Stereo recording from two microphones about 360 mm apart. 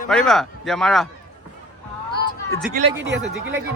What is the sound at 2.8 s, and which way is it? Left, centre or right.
Speech, right.